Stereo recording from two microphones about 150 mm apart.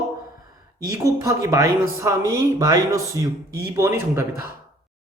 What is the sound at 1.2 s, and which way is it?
Speech, 20° right (ahead or behind).